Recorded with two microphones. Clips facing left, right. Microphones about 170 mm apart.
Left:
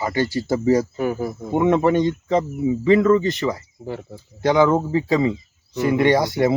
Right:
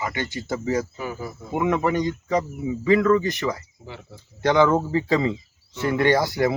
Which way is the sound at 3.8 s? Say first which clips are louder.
Left 14 dB; 45° left (ahead or behind).